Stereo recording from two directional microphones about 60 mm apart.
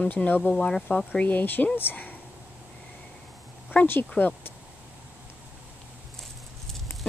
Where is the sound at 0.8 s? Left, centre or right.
Left.